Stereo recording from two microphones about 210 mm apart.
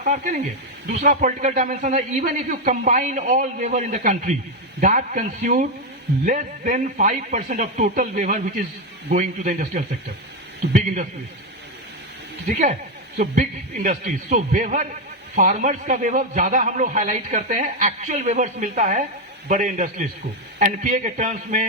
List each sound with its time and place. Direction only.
0.0 s a man's voice: 35° right (ahead or behind)
12.5 s a man's voice: 35° right (ahead or behind)